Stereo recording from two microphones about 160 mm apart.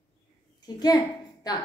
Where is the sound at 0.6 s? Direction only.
25° left (ahead or behind).